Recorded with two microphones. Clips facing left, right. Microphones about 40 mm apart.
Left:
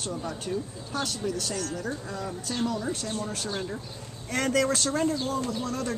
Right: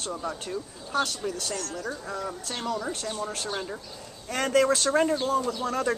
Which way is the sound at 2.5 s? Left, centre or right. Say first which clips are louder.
Left 2 dB; right.